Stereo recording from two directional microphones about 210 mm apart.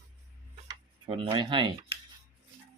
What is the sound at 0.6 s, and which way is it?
Speech, 25° right (ahead or behind).